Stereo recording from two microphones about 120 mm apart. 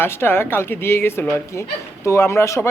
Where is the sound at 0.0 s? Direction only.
20° left (ahead or behind).